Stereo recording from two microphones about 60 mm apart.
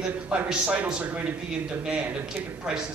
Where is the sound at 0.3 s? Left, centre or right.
Right.